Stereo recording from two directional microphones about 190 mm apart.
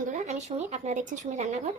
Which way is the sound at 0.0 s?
40° right (ahead or behind).